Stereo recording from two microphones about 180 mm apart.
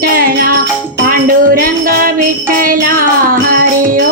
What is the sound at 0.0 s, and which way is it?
Music, 55° right (ahead or behind).